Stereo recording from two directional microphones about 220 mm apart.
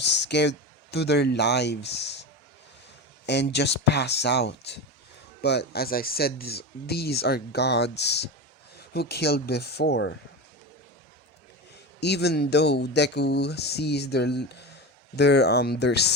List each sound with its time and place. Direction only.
0.0 s speech: 50° left (ahead or behind)
3.2 s speech: 50° left (ahead or behind)
11.9 s speech: 50° left (ahead or behind)